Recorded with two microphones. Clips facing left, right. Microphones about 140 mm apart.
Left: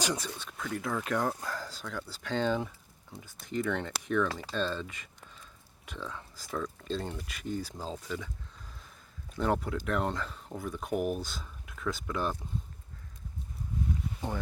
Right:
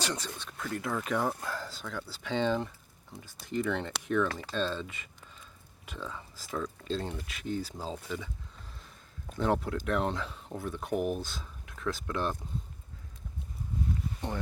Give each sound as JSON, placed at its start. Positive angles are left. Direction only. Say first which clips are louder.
{"t": 0.0, "sound": "speech", "louder": "left 2 dB", "side_deg": 10}
{"t": 9.4, "sound": "speech", "louder": "right 1 dB", "side_deg": 0}